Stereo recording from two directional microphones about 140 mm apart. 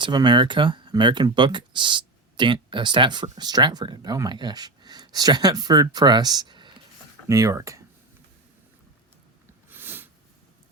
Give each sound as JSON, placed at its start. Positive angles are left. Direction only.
{"t": 0.0, "sound": "speech", "side_deg": -30}
{"t": 7.3, "sound": "speech", "side_deg": -20}
{"t": 9.6, "sound": "a sound", "side_deg": -15}